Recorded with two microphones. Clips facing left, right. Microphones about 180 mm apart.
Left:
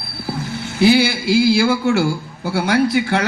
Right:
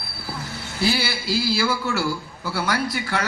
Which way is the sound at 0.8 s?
60° left (ahead or behind).